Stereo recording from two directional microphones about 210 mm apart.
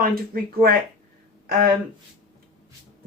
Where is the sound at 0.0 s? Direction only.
45° right (ahead or behind).